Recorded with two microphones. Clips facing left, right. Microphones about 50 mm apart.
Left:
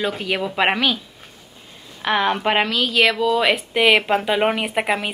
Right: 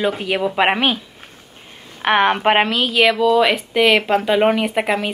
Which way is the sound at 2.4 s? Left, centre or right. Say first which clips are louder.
Right 4 dB; right.